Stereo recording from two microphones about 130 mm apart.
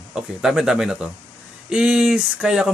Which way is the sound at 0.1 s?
5° right (ahead or behind).